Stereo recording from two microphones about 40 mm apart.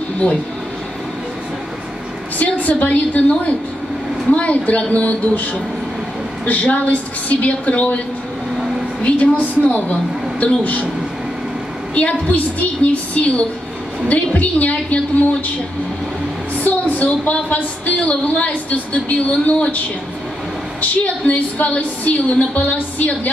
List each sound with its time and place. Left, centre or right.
2.3 s a woman's voice: left
9.2 s a woman's voice: left
11.9 s a woman's voice: left
16.5 s a woman's voice: left
20.8 s a woman's voice: left